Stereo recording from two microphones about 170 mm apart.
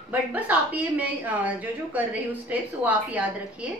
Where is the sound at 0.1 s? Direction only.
10° right (ahead or behind).